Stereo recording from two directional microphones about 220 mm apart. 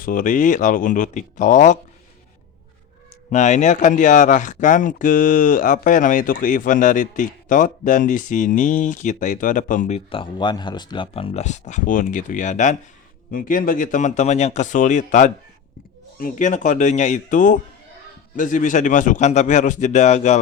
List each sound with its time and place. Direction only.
0.0 s speech: 40° left (ahead or behind)
3.2 s speech: 30° left (ahead or behind)